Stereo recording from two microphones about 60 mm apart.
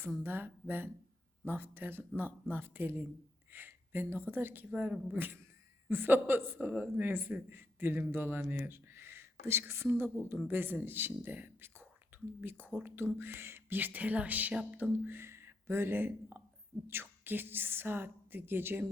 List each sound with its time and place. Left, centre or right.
0.2 s a woman's voice: right
4.7 s speech: right
5.1 s a woman's voice: right
6.7 s a woman's voice: right
13.1 s a woman's voice: right